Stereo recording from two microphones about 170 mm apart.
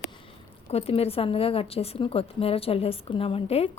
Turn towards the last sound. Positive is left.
turn(degrees=35)  # may be behind; listen again after turning